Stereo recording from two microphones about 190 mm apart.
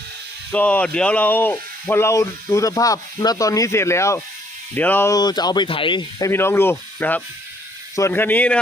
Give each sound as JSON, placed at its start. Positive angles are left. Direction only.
{"t": 0.5, "sound": "speech", "side_deg": 10}